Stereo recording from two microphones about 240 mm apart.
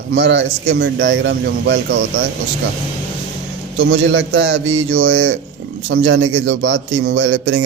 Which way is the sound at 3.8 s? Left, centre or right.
Right.